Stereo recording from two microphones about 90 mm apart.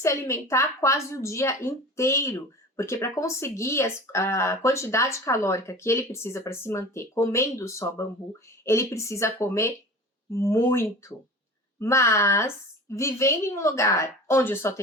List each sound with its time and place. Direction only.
0.0 s a woman's voice: 30° left (ahead or behind)